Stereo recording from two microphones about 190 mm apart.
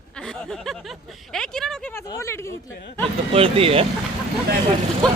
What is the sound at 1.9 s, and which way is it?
Speech, 15° left (ahead or behind).